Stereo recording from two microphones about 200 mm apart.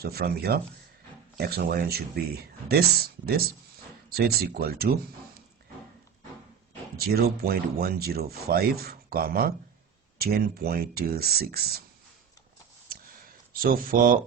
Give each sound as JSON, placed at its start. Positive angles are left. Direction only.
{"t": 0.0, "sound": "speech", "side_deg": -50}
{"t": 6.9, "sound": "speech", "side_deg": -50}
{"t": 13.6, "sound": "speech", "side_deg": -45}